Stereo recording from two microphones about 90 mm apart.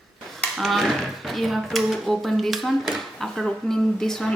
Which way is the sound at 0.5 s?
Centre (ahead or behind).